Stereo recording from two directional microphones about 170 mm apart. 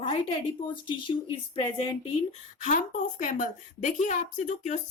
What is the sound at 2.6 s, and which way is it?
A woman's voice, 50° left (ahead or behind).